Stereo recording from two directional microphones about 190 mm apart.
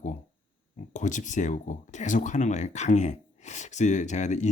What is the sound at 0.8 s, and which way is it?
Speech, 40° left (ahead or behind).